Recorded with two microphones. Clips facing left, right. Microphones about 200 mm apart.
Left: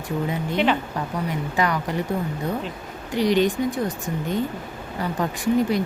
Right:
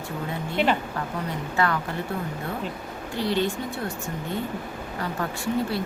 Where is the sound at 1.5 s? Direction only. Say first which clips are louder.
Left 1 dB; 15° left (ahead or behind).